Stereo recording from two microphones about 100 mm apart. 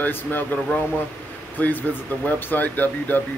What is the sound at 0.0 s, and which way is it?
Speech, 20° left (ahead or behind).